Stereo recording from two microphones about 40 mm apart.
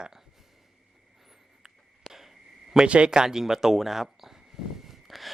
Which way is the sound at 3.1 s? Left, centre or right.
Centre.